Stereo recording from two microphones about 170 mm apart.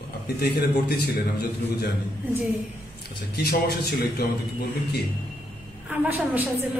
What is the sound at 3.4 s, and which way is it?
Speech, 65° left (ahead or behind).